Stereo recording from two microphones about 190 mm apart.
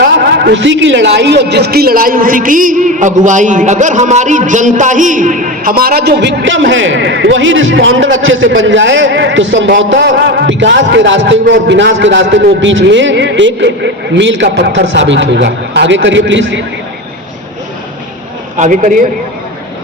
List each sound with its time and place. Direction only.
0.0 s a man's voice: 65° right (ahead or behind)
18.5 s a man's voice: 40° right (ahead or behind)